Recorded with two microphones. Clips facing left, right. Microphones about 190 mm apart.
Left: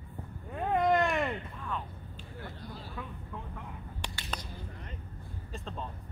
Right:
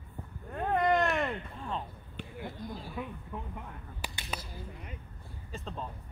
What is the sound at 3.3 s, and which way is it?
Vehicle, 15° right (ahead or behind).